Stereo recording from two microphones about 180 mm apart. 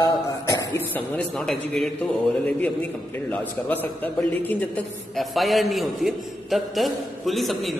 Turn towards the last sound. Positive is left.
turn(degrees=0)  # may be behind; listen again after turning